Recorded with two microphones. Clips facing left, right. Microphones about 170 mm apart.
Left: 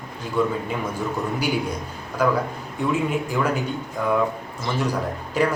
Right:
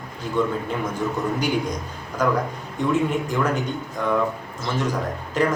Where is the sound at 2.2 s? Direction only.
10° left (ahead or behind).